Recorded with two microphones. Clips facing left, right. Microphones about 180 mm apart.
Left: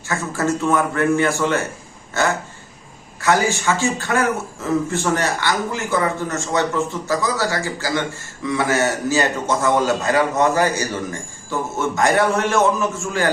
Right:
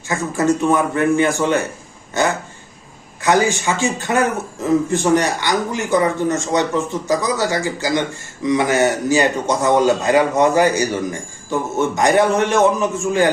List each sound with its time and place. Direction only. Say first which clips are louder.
0.1 s a man's voice: right 4 dB; 15° right (ahead or behind)